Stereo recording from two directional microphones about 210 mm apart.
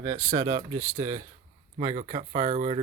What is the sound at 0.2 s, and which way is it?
Speech, 30° right (ahead or behind).